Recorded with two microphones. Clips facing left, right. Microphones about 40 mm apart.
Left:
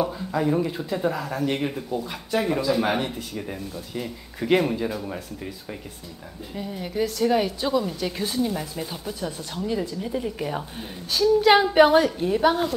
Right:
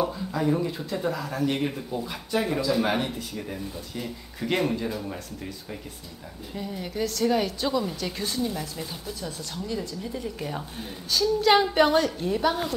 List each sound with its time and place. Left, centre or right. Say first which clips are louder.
0.0 s a woman's voice: left 2 dB; centre